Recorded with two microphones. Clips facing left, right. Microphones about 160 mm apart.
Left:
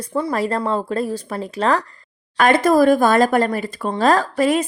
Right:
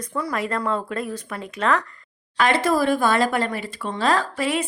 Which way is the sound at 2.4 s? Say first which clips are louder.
Left 6 dB; 45° left (ahead or behind).